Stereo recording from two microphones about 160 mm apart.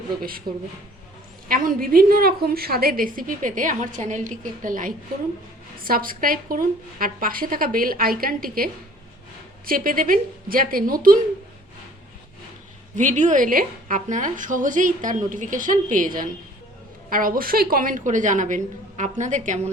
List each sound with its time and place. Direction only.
0.2 s a woman's voice: 65° right (ahead or behind)
1.5 s a woman's voice: 60° right (ahead or behind)
13.0 s a woman's voice: 50° right (ahead or behind)